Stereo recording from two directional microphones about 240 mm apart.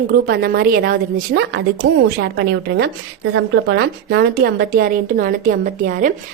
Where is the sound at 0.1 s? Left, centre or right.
Right.